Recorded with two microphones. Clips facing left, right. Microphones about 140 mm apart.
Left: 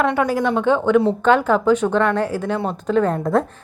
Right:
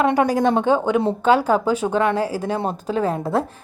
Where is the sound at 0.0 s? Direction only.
35° right (ahead or behind).